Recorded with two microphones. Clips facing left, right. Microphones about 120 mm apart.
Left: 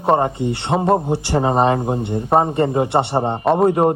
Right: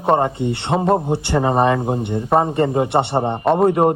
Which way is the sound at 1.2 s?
25° left (ahead or behind).